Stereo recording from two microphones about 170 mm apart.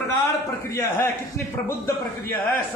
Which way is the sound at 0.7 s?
20° left (ahead or behind).